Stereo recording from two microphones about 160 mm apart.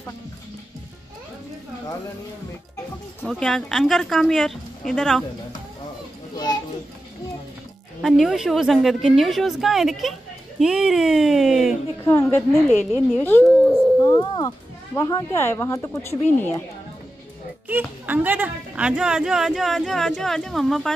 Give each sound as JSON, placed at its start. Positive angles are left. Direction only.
{"t": 3.3, "sound": "speech", "side_deg": 0}
{"t": 6.3, "sound": "children playing", "side_deg": 25}
{"t": 8.0, "sound": "speech", "side_deg": 0}
{"t": 12.0, "sound": "speech", "side_deg": 15}
{"t": 13.9, "sound": "speech", "side_deg": 25}
{"t": 17.6, "sound": "speech", "side_deg": -10}